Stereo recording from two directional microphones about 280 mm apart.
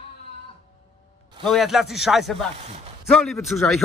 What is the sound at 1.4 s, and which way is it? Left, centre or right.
A man's voice, centre.